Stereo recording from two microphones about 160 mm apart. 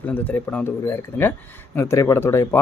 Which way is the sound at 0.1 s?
10° left (ahead or behind).